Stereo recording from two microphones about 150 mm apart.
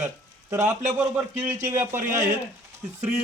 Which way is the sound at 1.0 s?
15° right (ahead or behind).